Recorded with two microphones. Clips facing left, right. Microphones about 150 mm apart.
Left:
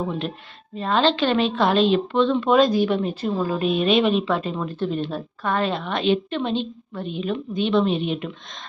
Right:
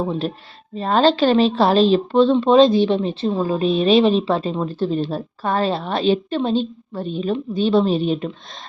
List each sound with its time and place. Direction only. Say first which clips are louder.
0.0 s speech: right 4 dB; 35° right (ahead or behind)